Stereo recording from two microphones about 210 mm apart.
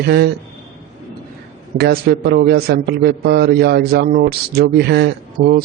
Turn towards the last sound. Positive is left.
turn(degrees=-50)  # may be behind; listen again after turning